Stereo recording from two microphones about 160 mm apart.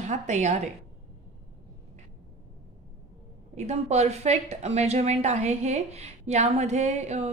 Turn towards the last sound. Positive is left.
turn(degrees=-45)  # may be behind; listen again after turning